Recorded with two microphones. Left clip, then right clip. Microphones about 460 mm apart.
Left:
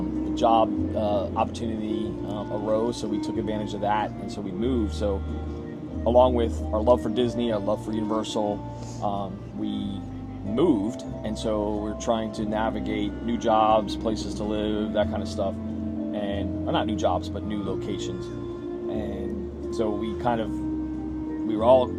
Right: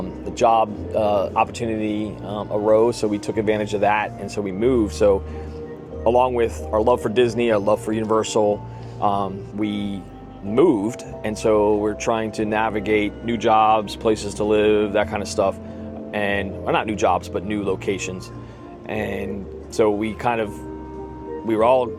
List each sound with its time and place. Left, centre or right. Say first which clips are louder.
0.5 s music: right 3 dB; right
1.1 s speech: right 6 dB; centre
9.0 s speech: right 8 dB; right
10.6 s speech: right 6 dB; right
19.7 s speech: right 9 dB; right